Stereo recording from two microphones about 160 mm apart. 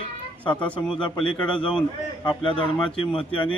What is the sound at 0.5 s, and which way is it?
Speech, 10° left (ahead or behind).